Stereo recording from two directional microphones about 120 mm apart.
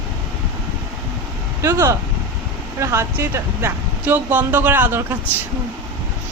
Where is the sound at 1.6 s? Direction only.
25° right (ahead or behind).